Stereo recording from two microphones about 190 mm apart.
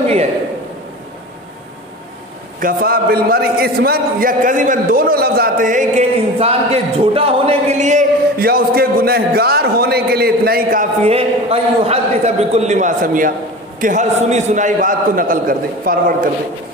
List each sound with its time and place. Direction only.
2.6 s speech: 50° right (ahead or behind)
6.3 s speech: 30° right (ahead or behind); by 10.9 s 50° right (ahead or behind)
11.1 s a man's voice: 30° right (ahead or behind); by 16.3 s 50° right (ahead or behind)